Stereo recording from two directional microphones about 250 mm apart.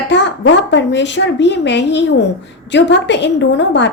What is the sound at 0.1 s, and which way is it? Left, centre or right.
A woman's voice, left.